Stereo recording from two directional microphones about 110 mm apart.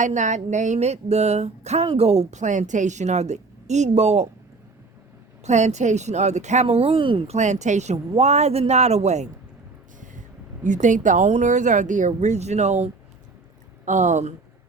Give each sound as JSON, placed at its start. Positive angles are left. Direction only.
{"t": 0.1, "sound": "speech", "side_deg": -90}
{"t": 1.9, "sound": "speech", "side_deg": -70}
{"t": 5.4, "sound": "speech", "side_deg": -90}
{"t": 7.3, "sound": "speech", "side_deg": -90}
{"t": 7.9, "sound": "speech", "side_deg": -75}
{"t": 10.7, "sound": "speech", "side_deg": -90}
{"t": 14.1, "sound": "speech", "side_deg": -90}